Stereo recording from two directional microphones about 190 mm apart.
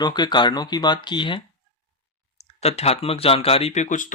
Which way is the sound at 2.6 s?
35° left (ahead or behind).